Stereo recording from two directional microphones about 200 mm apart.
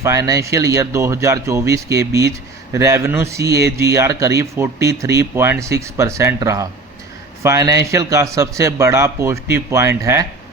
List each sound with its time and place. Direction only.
0.0 s a man's voice: 15° right (ahead or behind)